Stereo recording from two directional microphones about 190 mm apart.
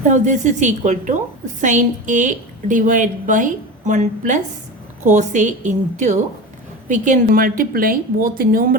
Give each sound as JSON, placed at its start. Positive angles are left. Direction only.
{"t": 0.1, "sound": "a woman's voice", "side_deg": -40}